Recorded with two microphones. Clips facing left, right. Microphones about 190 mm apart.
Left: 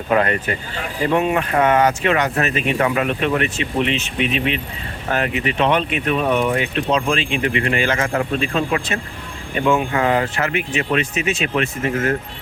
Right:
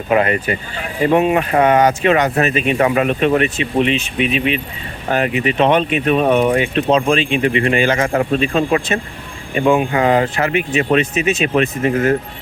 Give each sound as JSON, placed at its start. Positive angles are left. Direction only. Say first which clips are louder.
{"t": 0.1, "sound": "speech", "louder": "right 3 dB", "side_deg": -10}